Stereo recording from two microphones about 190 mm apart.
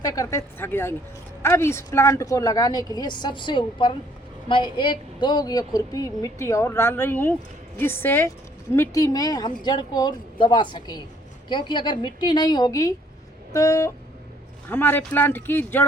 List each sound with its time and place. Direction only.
0.0 s a woman's voice: 20° left (ahead or behind)